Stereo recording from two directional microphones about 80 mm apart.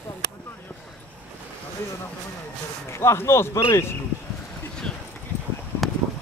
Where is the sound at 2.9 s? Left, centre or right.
Left.